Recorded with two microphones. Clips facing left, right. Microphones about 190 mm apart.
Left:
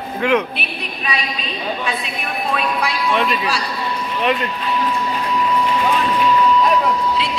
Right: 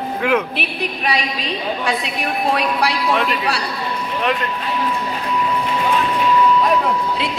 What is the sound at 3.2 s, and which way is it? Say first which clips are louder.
Music: even; 65° right (ahead or behind).